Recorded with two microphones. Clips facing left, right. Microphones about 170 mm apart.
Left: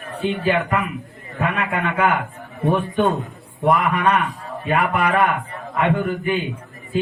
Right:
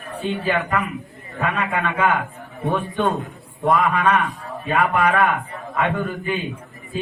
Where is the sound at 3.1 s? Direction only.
Centre (ahead or behind).